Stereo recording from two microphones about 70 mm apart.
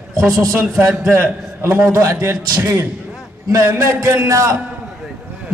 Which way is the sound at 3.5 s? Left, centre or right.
Right.